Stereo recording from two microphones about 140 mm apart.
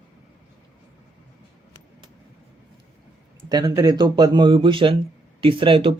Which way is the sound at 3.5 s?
30° right (ahead or behind).